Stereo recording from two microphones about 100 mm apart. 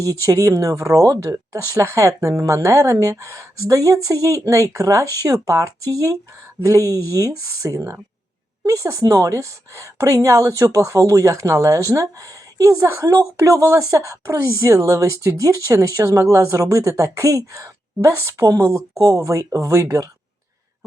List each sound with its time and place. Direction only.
0.0 s a woman's voice: 35° right (ahead or behind)